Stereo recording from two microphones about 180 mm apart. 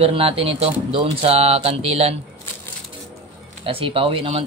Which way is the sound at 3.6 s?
30° right (ahead or behind).